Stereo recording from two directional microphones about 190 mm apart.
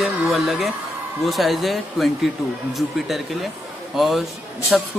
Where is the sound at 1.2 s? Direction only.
Centre (ahead or behind).